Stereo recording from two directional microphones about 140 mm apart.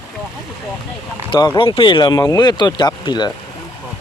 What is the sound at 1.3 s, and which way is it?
Speech, 30° left (ahead or behind).